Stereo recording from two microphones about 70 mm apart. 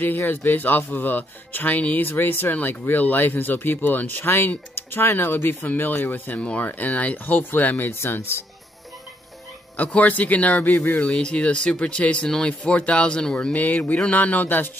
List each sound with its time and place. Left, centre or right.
0.0 s speech: left
9.8 s speech: left